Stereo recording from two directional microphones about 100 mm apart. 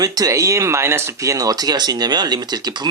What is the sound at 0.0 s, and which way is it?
Speech, 40° right (ahead or behind).